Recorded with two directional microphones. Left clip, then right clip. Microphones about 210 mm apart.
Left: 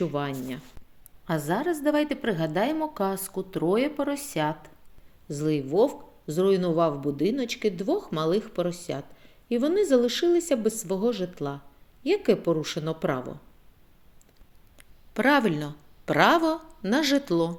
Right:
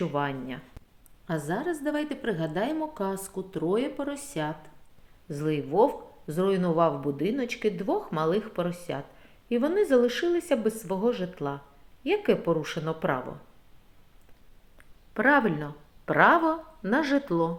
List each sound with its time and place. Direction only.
0.0 s a woman's voice: 35° left (ahead or behind)
14.8 s speech: 40° left (ahead or behind)